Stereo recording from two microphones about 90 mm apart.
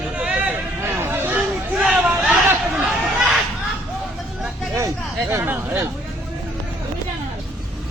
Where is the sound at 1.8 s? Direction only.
10° right (ahead or behind).